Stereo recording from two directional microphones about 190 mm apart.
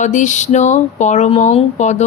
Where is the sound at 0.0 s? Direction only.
40° left (ahead or behind).